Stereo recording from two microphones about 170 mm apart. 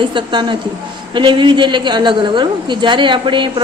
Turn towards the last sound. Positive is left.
turn(degrees=-30)  # may be behind; listen again after turning